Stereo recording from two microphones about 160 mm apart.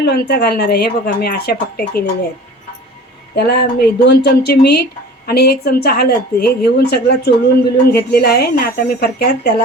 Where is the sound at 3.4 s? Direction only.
90° left.